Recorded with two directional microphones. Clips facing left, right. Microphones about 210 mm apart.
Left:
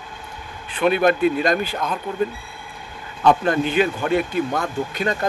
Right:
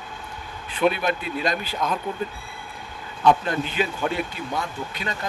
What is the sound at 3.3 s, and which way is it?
A man's voice, 55° left (ahead or behind).